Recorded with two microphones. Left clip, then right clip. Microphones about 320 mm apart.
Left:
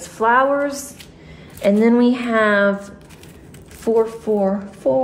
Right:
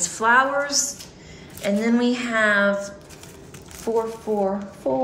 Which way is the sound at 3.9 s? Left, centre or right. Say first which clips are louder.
Left 6 dB; left.